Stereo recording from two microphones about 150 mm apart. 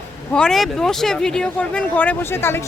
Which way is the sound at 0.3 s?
5° left (ahead or behind).